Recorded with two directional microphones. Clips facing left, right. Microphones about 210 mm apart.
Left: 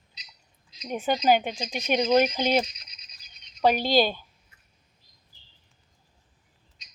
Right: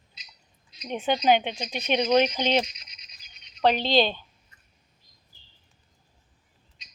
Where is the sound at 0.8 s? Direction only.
5° left (ahead or behind).